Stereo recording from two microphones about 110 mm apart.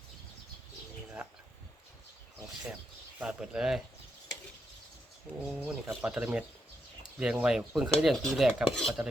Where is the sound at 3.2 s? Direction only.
10° right (ahead or behind).